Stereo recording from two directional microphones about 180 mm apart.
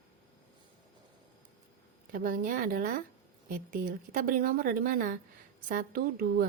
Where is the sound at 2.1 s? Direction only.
50° right (ahead or behind).